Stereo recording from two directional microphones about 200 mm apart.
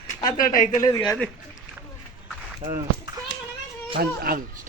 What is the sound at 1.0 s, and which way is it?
Speech, 5° left (ahead or behind).